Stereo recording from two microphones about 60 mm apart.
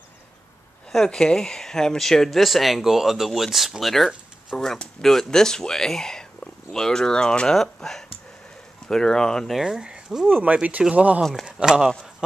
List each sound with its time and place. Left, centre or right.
0.9 s speech: centre
9.5 s speech: centre
10.2 s speech: right